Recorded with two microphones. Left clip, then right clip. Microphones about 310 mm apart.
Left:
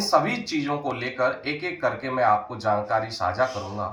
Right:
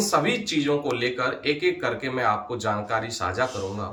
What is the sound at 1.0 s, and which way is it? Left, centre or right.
Speech, centre.